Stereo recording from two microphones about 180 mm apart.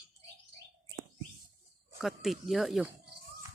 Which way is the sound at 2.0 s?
Centre (ahead or behind).